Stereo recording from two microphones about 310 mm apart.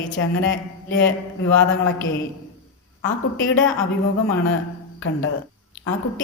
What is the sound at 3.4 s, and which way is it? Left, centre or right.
Speech, left.